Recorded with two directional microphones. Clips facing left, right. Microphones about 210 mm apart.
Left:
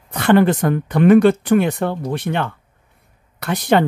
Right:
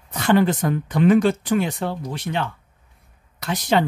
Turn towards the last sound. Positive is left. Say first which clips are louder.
# left 4 dB
turn(degrees=60)  # may be behind; listen again after turning